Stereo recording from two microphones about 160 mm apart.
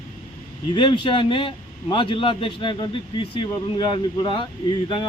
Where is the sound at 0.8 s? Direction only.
30° left (ahead or behind).